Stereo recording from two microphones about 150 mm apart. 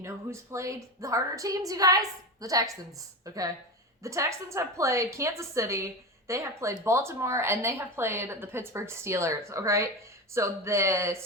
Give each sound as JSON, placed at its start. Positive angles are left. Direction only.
{"t": 0.0, "sound": "a woman's voice", "side_deg": -20}